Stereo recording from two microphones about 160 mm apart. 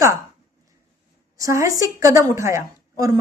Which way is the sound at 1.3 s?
20° right (ahead or behind).